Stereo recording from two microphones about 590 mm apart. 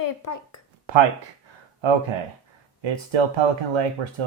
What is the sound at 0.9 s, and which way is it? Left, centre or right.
Speech, right.